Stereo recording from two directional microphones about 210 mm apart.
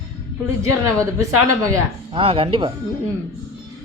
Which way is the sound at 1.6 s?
15° right (ahead or behind).